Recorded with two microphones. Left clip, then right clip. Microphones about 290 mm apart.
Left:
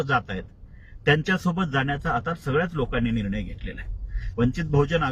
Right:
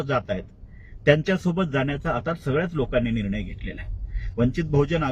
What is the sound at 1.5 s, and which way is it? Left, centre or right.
Speech, centre.